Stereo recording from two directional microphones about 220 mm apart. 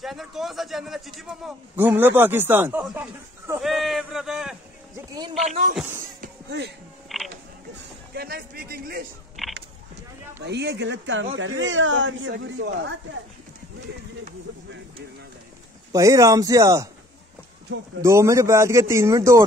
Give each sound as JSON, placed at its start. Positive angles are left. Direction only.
{"t": 0.0, "sound": "a man's voice", "side_deg": 0}
{"t": 6.2, "sound": "music", "side_deg": -50}
{"t": 7.1, "sound": "a sound", "side_deg": 0}
{"t": 8.1, "sound": "a man's voice", "side_deg": -45}
{"t": 9.5, "sound": "a sound", "side_deg": -50}
{"t": 11.3, "sound": "speech", "side_deg": -60}
{"t": 15.9, "sound": "speech", "side_deg": -15}
{"t": 18.0, "sound": "speech", "side_deg": -15}